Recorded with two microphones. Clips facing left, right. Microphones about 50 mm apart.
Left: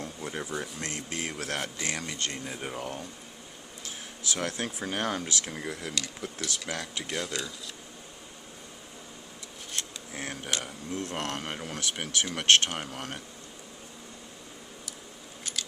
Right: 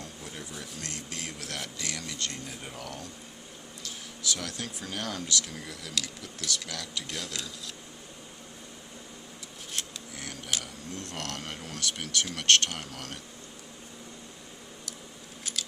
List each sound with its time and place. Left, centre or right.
0.0 s a sound: left
0.6 s speech: left
7.1 s speech: centre
10.2 s speech: left